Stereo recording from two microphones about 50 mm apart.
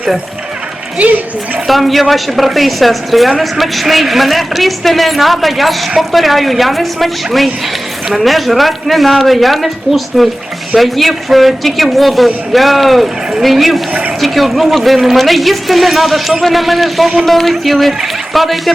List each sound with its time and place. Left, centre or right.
0.9 s speech: right
1.6 s a woman's voice: centre